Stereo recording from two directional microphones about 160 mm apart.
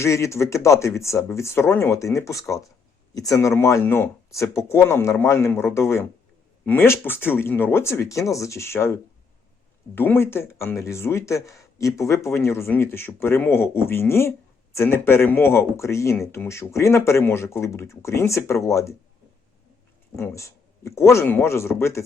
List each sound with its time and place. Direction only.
0.0 s speech: 20° left (ahead or behind)
20.1 s speech: 15° left (ahead or behind)